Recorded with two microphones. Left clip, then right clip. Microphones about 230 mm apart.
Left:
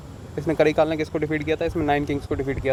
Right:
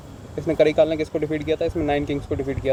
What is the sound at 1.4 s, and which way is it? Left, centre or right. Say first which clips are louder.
Speech: right 1 dB; left.